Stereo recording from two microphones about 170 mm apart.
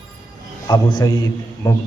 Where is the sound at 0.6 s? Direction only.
20° left (ahead or behind).